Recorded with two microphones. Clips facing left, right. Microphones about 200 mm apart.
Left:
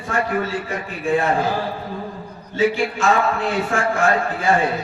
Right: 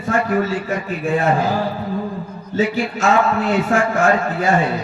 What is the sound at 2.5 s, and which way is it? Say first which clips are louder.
Music: even; 40° right (ahead or behind).